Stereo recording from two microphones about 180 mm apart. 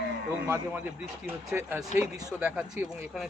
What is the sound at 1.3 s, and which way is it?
Speech, 15° right (ahead or behind).